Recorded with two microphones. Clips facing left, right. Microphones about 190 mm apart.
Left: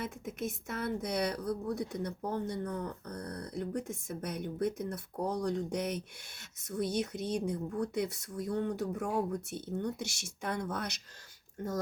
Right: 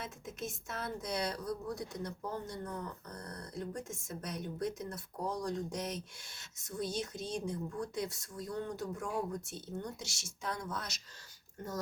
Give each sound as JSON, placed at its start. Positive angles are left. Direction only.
{"t": 0.0, "sound": "a woman's voice", "side_deg": 55}